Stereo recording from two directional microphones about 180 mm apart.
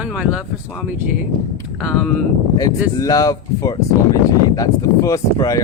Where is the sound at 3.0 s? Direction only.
20° left (ahead or behind).